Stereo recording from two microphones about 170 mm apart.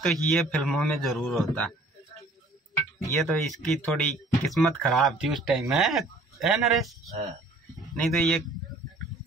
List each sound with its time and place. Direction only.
0.0 s speech: centre (ahead or behind)
3.2 s speech: centre (ahead or behind)